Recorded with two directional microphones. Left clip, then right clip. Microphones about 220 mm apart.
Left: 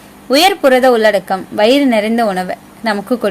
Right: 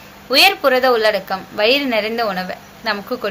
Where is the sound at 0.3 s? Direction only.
45° left (ahead or behind).